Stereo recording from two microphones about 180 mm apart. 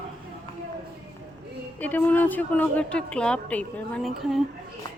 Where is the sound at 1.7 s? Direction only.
10° left (ahead or behind).